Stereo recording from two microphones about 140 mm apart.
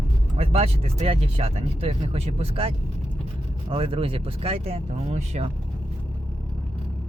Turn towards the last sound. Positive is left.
turn(degrees=-50)  # may be behind; listen again after turning